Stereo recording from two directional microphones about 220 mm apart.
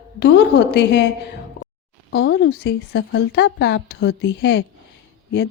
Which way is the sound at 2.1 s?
55° left (ahead or behind).